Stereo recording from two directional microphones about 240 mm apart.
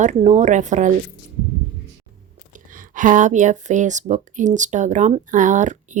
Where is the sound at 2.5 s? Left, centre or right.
Right.